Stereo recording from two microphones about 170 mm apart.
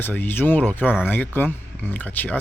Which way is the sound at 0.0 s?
10° left (ahead or behind).